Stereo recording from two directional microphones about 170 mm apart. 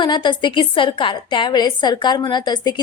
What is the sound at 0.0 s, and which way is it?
A woman's voice, 25° left (ahead or behind).